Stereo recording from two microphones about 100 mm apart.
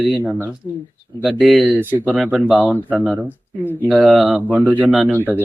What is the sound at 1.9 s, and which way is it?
Speech, 15° right (ahead or behind).